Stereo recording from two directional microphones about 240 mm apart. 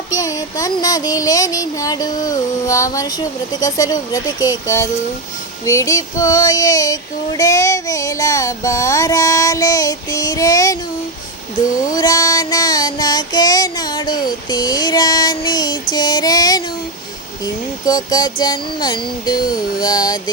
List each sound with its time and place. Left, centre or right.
0.1 s child singing: centre
11.9 s child singing: centre